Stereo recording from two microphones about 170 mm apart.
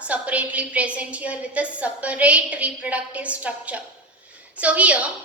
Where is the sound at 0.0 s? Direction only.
10° right (ahead or behind).